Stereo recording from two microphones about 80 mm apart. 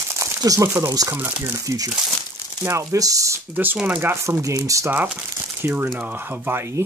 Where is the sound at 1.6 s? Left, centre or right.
Right.